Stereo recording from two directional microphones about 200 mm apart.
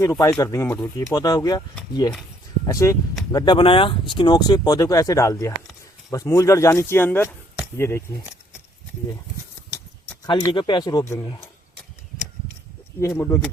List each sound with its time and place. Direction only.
0.0 s speech: 15° left (ahead or behind)
2.6 s speech: 15° left (ahead or behind)
10.2 s speech: 25° left (ahead or behind)
13.0 s speech: 15° left (ahead or behind)